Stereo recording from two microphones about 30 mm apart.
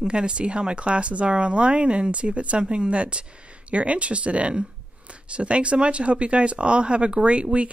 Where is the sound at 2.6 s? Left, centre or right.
Right.